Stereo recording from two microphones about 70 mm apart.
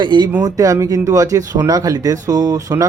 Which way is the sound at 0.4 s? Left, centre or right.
Right.